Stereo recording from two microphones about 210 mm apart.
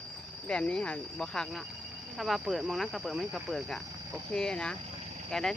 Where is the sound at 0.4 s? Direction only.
5° left (ahead or behind).